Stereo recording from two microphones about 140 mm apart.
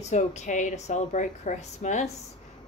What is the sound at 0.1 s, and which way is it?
A woman's voice, 55° left (ahead or behind).